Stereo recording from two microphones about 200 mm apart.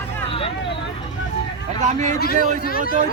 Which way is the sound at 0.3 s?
25° left (ahead or behind).